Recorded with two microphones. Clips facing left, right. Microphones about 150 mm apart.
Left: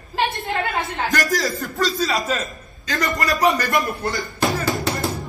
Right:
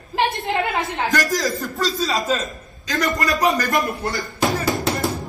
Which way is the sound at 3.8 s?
Centre (ahead or behind).